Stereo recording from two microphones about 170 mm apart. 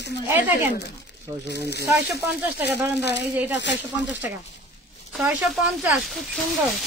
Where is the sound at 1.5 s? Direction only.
75° left (ahead or behind).